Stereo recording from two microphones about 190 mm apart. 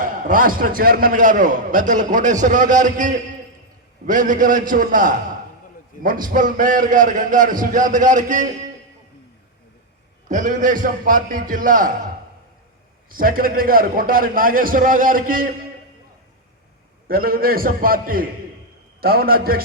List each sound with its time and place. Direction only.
0.0 s a man's voice: 45° right (ahead or behind)
6.2 s a man's voice: 45° right (ahead or behind)
10.2 s a man's voice: 40° right (ahead or behind)
13.1 s a man's voice: 50° right (ahead or behind)
17.1 s a man's voice: 50° right (ahead or behind)